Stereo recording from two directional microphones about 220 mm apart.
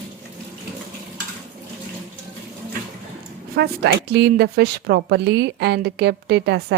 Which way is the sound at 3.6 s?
50° right (ahead or behind).